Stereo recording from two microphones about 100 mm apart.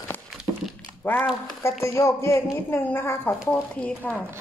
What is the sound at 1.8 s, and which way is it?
Speech, 30° left (ahead or behind).